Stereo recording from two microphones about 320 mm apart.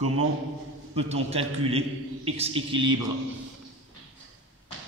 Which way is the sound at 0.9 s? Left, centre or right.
Centre.